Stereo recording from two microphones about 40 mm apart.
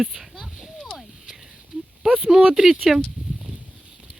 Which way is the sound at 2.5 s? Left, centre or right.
Centre.